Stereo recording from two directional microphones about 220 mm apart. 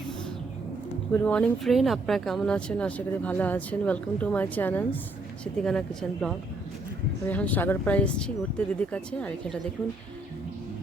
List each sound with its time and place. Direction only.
1.2 s speech: 5° left (ahead or behind)